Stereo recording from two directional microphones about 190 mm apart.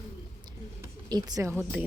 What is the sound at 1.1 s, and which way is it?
Speech, 20° right (ahead or behind).